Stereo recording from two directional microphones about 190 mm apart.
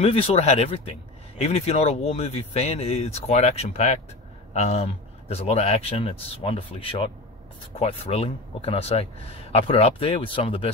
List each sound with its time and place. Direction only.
0.0 s speech: 30° left (ahead or behind)